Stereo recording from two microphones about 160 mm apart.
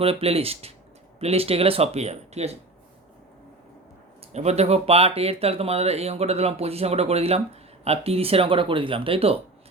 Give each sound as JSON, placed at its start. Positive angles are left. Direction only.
{"t": 0.0, "sound": "speech", "side_deg": -35}
{"t": 4.3, "sound": "speech", "side_deg": -45}